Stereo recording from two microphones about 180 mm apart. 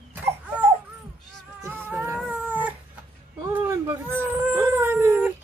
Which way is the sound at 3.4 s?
15° right (ahead or behind).